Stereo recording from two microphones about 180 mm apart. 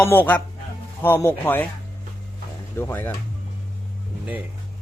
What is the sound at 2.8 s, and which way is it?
Speech, 10° left (ahead or behind).